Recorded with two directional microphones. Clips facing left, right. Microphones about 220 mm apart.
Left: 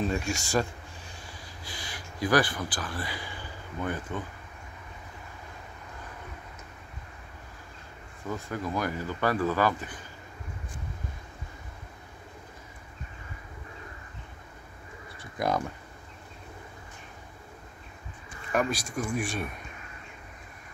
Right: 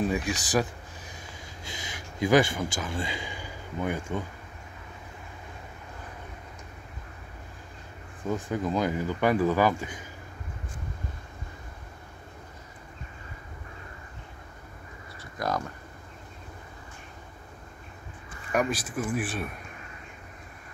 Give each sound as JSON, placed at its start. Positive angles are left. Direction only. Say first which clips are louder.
{"t": 0.0, "sound": "speech", "louder": "right 2 dB", "side_deg": -15}
{"t": 1.7, "sound": "speech", "louder": "right 2 dB", "side_deg": -20}
{"t": 8.3, "sound": "speech", "louder": "right 4 dB", "side_deg": -15}
{"t": 15.3, "sound": "speech", "louder": "left 2 dB", "side_deg": 20}
{"t": 18.5, "sound": "speech", "louder": "right 1 dB", "side_deg": -5}